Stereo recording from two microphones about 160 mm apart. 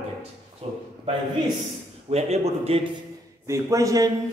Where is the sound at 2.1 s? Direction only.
40° right (ahead or behind).